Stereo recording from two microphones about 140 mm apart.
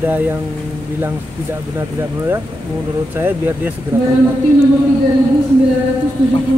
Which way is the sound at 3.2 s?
15° right (ahead or behind).